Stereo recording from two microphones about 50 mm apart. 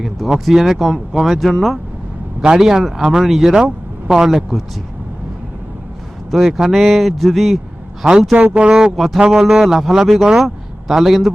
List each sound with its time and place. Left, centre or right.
0.3 s speech: centre
6.3 s speech: centre
8.5 s speech: centre
9.0 s speech: centre